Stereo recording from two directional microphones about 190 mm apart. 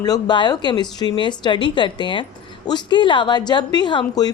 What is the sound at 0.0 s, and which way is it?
A woman's voice, 20° left (ahead or behind).